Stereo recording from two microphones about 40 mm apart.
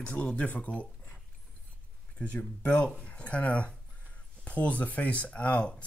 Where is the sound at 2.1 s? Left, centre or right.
Left.